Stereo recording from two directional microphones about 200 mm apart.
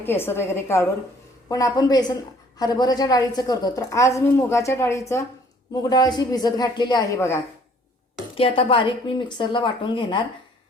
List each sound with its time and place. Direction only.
0.0 s a woman's voice: 10° left (ahead or behind)
8.4 s speech: 30° left (ahead or behind)